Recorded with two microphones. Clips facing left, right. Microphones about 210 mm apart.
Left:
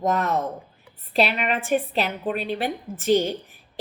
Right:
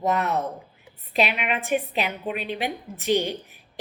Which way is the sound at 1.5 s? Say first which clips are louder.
Left 2 dB; 40° left (ahead or behind).